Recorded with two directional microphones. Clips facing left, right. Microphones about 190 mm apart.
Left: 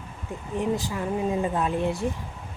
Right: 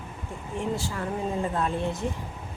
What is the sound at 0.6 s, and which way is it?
Speech, 15° left (ahead or behind).